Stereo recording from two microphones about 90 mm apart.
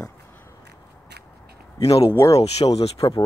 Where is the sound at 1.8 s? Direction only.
40° left (ahead or behind).